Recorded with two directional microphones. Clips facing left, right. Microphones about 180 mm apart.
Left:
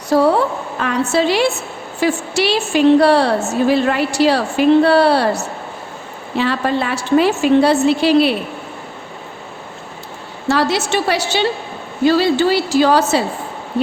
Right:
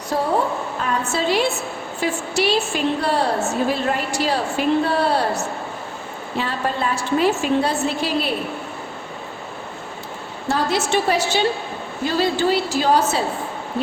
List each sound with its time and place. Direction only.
0.1 s a woman's voice: 90° left
6.4 s a woman's voice: 80° left
10.5 s a woman's voice: 85° left